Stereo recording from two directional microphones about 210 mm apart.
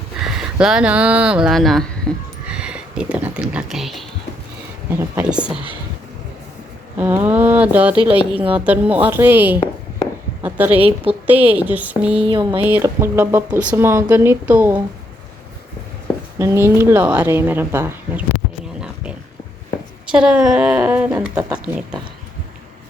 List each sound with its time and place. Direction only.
0.3 s speech: 5° right (ahead or behind)
7.2 s speech: 10° right (ahead or behind)
12.2 s speech: 20° right (ahead or behind)
12.6 s speech: 10° right (ahead or behind)
16.4 s speech: 10° right (ahead or behind)
20.1 s a woman's voice: 5° right (ahead or behind)